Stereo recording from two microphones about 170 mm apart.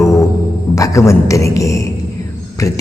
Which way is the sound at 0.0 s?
20° left (ahead or behind).